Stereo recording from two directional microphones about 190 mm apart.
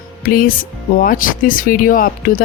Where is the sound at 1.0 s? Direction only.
45° left (ahead or behind).